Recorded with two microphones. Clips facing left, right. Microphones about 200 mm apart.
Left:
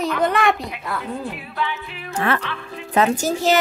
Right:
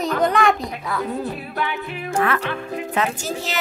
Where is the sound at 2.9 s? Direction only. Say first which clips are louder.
Left 7 dB; 40° left (ahead or behind).